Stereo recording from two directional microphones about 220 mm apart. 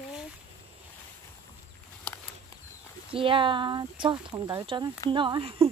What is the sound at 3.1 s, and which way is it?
Speech, 25° right (ahead or behind).